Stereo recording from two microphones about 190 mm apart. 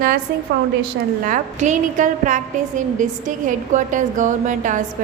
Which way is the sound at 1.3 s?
40° right (ahead or behind).